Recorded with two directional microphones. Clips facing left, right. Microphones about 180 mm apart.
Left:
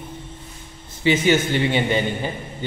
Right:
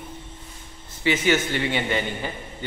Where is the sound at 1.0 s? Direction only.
20° left (ahead or behind).